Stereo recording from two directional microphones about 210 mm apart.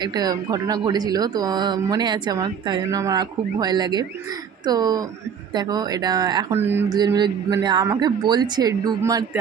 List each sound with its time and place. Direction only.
0.0 s speech: 20° right (ahead or behind)